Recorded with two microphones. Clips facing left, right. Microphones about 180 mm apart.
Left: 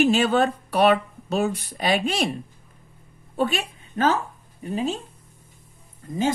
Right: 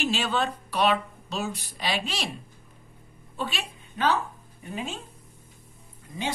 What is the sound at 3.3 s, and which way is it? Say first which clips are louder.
Speech: left 9 dB; 50° left (ahead or behind).